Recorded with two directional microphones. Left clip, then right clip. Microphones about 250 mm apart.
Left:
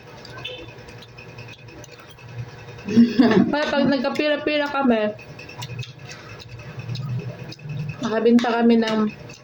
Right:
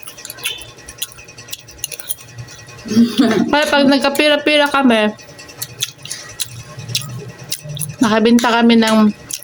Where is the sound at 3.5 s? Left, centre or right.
Right.